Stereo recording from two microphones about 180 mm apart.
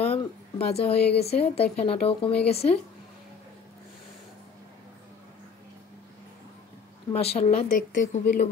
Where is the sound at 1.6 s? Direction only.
35° left (ahead or behind).